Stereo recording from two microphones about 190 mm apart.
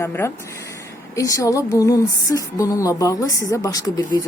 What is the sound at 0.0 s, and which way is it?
Speech, 15° left (ahead or behind).